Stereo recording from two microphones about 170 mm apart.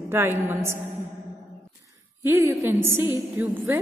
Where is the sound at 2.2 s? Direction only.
15° right (ahead or behind).